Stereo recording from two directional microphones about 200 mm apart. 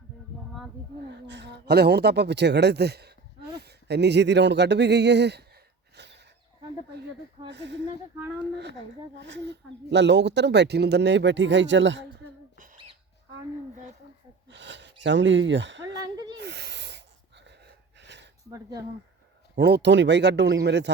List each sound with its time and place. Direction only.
1.1 s speech: 60° right (ahead or behind)
6.0 s a sound: 60° right (ahead or behind)
7.4 s speech: 60° right (ahead or behind)
9.1 s speech: 65° right (ahead or behind)
14.4 s gasp: 65° right (ahead or behind)
16.0 s a sound: 20° right (ahead or behind)
16.4 s wheeze: 55° right (ahead or behind)
19.5 s speech: 60° right (ahead or behind)